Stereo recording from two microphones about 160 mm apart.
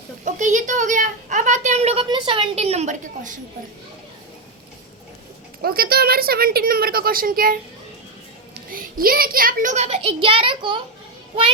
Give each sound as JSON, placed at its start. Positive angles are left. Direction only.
{"t": 0.3, "sound": "a sound", "side_deg": -50}
{"t": 2.0, "sound": "a woman's voice", "side_deg": -30}
{"t": 5.6, "sound": "a woman's voice", "side_deg": -70}
{"t": 8.7, "sound": "a child's voice", "side_deg": -65}